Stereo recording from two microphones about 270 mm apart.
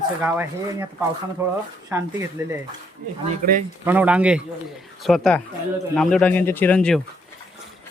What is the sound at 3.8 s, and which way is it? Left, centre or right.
Speech, centre.